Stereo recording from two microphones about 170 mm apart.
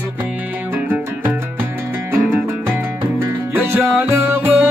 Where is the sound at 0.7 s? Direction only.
10° right (ahead or behind).